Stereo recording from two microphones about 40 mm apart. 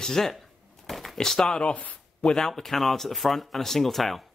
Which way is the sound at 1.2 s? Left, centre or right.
Centre.